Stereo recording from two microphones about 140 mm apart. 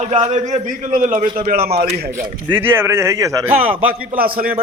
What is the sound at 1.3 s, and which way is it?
Speech, 85° right.